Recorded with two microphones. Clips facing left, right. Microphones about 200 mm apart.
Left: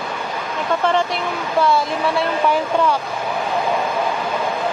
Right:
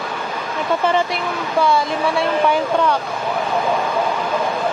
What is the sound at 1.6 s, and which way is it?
Speech, centre (ahead or behind).